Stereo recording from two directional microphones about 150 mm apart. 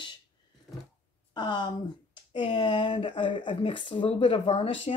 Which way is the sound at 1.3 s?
30° left (ahead or behind).